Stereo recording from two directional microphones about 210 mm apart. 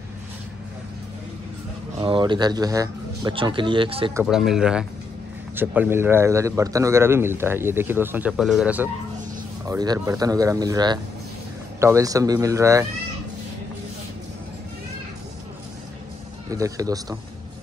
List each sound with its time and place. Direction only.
2.0 s speech: 25° right (ahead or behind)
4.1 s a man's voice: 5° right (ahead or behind)
9.7 s a man's voice: 15° right (ahead or behind)
16.4 s a man's voice: 15° right (ahead or behind)